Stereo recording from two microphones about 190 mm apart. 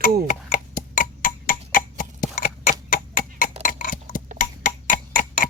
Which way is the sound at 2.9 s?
45° left (ahead or behind).